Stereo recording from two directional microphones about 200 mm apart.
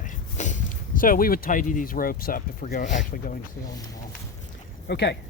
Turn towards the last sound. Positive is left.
turn(degrees=55)  # may be behind; listen again after turning